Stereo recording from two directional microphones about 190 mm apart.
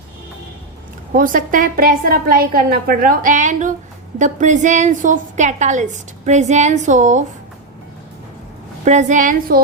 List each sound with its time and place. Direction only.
1.1 s a woman's voice: 45° right (ahead or behind)
8.8 s a woman's voice: 40° right (ahead or behind)